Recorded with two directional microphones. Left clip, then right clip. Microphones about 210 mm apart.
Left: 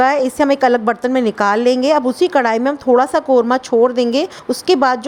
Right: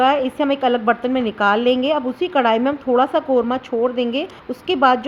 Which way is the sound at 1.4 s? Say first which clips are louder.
Left 1 dB; 35° left (ahead or behind).